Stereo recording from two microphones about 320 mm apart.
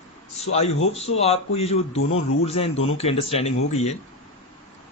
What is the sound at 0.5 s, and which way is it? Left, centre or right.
Speech, centre.